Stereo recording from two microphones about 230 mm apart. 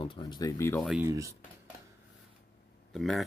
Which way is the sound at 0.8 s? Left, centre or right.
Centre.